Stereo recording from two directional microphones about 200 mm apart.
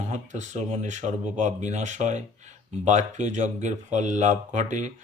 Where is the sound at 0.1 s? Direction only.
35° right (ahead or behind).